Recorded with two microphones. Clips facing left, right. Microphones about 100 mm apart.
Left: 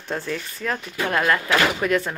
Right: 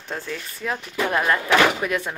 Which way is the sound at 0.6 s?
15° right (ahead or behind).